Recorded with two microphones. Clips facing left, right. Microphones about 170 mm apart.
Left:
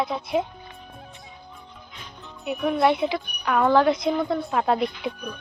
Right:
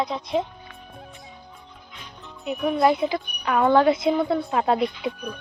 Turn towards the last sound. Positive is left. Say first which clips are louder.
# right 2 dB
turn(degrees=0)  # may be behind; listen again after turning